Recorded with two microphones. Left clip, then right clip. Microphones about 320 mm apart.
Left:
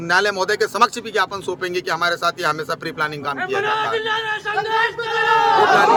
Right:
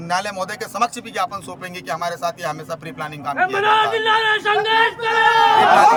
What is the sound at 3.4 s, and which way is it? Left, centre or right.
A man's voice, right.